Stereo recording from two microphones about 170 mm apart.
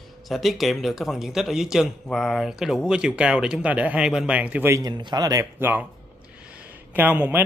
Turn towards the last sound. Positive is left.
turn(degrees=-10)  # may be behind; listen again after turning